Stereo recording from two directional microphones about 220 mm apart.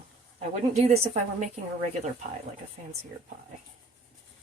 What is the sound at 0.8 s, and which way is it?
Speech, 30° right (ahead or behind).